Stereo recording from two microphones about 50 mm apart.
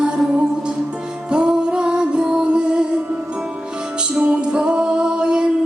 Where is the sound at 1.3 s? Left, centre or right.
Centre.